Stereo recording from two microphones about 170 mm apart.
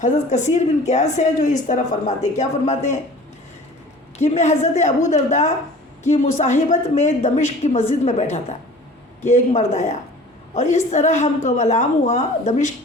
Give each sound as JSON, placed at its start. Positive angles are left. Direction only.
{"t": 0.0, "sound": "a woman's voice", "side_deg": 45}
{"t": 4.2, "sound": "a woman's voice", "side_deg": 45}